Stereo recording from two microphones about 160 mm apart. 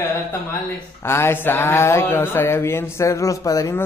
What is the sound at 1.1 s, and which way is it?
Speech, 15° left (ahead or behind).